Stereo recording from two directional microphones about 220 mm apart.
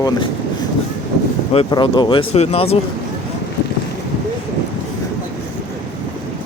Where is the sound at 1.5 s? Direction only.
20° left (ahead or behind).